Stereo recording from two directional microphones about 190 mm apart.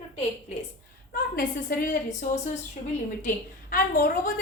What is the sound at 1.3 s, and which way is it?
A woman's voice, 50° left (ahead or behind).